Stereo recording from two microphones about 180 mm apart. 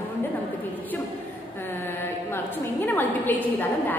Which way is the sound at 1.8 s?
10° left (ahead or behind).